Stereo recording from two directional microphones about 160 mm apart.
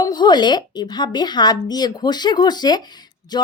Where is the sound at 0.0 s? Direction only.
25° left (ahead or behind).